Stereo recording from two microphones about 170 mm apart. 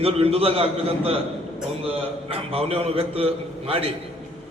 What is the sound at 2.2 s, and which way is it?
A man's voice, 35° right (ahead or behind).